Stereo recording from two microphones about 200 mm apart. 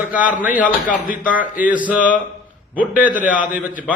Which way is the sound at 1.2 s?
5° right (ahead or behind).